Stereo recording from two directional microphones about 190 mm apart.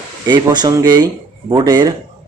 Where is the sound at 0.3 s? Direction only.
20° right (ahead or behind).